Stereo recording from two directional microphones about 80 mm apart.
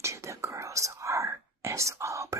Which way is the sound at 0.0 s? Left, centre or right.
Right.